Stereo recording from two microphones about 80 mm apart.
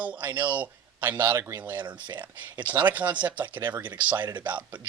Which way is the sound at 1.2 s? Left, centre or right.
Right.